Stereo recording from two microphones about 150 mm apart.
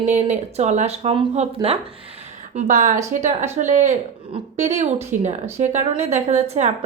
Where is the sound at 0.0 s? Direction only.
50° right (ahead or behind).